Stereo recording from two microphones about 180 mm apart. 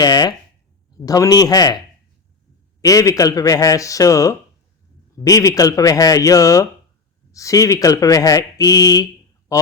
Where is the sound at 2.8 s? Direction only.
20° left (ahead or behind).